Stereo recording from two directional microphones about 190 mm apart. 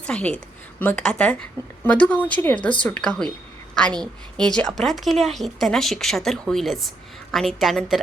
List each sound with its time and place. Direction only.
0.0 s a woman's voice: 5° left (ahead or behind)